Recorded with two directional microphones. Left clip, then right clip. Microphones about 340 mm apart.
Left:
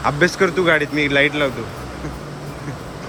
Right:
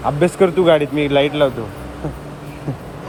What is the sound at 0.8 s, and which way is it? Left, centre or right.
Speech, right.